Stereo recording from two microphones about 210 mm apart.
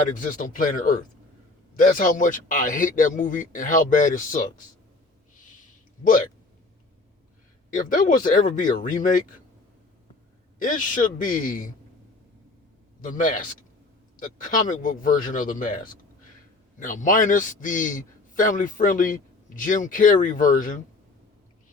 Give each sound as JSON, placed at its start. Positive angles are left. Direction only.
{"t": 0.1, "sound": "a man's voice", "side_deg": 40}
{"t": 7.7, "sound": "a man's voice", "side_deg": 40}
{"t": 10.6, "sound": "a man's voice", "side_deg": 40}
{"t": 13.0, "sound": "a man's voice", "side_deg": 40}